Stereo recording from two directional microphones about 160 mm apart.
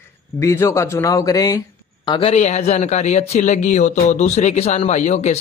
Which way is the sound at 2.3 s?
45° left (ahead or behind).